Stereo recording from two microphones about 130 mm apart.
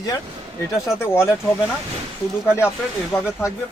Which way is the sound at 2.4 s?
20° left (ahead or behind).